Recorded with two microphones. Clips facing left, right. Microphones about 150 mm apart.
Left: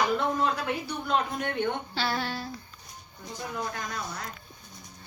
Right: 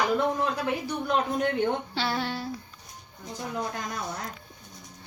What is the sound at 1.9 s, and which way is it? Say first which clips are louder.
Speech: right 1 dB; 20° right (ahead or behind).